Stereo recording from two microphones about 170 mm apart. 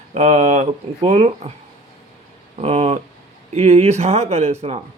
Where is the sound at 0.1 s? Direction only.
40° right (ahead or behind).